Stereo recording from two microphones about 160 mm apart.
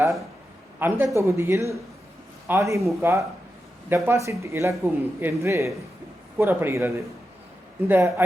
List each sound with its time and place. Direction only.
0.8 s speech: 15° right (ahead or behind)